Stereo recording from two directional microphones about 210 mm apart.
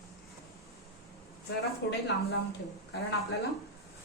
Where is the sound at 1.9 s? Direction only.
55° left (ahead or behind).